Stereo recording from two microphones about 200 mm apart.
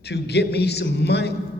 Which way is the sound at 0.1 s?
55° left (ahead or behind).